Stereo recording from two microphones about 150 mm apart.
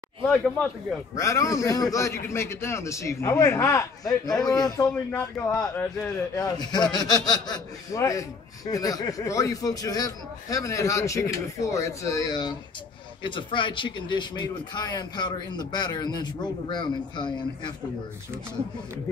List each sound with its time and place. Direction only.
1.1 s a man's voice: 20° left (ahead or behind)